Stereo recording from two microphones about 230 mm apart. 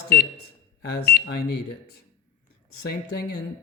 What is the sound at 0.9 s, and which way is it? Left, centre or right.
Speech, left.